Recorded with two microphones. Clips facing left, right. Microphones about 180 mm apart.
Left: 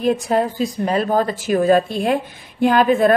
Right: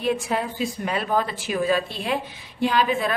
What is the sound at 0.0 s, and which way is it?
A woman's voice, 45° left (ahead or behind).